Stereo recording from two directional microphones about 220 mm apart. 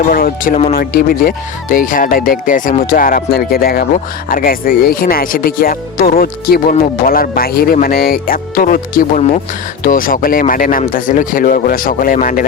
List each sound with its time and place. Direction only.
0.1 s speech: 40° left (ahead or behind)